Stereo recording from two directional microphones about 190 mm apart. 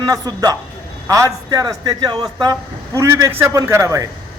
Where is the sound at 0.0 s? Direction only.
20° right (ahead or behind).